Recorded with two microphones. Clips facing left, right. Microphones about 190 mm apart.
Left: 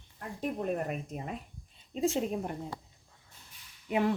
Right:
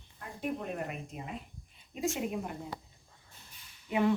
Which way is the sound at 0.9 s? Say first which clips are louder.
Left 4 dB; 45° left (ahead or behind).